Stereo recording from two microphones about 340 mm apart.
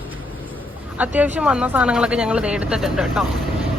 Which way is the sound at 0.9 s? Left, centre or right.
Centre.